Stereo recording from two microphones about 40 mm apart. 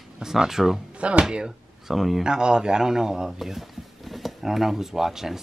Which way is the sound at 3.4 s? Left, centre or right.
Centre.